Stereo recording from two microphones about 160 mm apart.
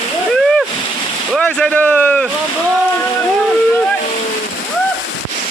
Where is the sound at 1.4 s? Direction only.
5° left (ahead or behind).